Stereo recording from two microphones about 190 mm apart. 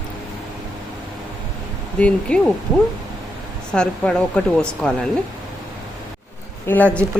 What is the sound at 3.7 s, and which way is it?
Speech, 5° left (ahead or behind).